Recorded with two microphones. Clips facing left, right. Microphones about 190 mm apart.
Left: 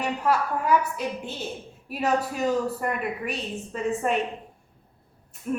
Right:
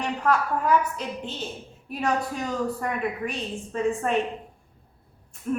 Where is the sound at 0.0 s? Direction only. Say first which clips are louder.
Even; 10° left (ahead or behind).